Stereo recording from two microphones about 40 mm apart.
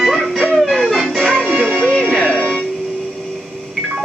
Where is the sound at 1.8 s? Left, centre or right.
Left.